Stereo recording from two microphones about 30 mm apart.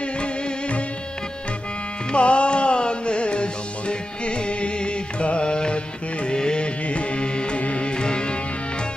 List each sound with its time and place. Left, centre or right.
0.0 s music: left
2.1 s music: left
6.9 s music: left
7.9 s music: left